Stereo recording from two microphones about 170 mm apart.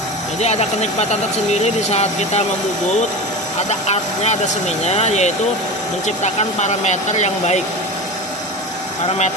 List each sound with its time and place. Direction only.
0.3 s speech: 40° left (ahead or behind)
3.7 s speech: 40° left (ahead or behind)